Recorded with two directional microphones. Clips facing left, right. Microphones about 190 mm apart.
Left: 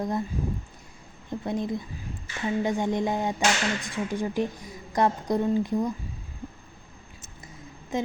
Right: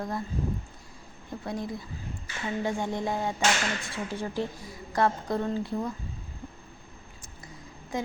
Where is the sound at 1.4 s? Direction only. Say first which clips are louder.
Left 5 dB; 20° left (ahead or behind).